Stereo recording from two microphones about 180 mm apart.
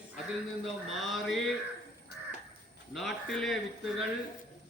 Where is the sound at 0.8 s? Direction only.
Centre (ahead or behind).